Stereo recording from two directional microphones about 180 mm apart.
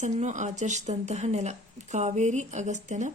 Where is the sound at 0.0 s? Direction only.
40° right (ahead or behind).